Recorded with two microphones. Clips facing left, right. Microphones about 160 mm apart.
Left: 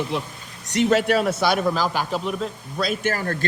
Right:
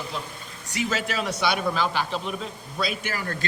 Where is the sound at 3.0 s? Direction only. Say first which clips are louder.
Left 7 dB; 50° left (ahead or behind).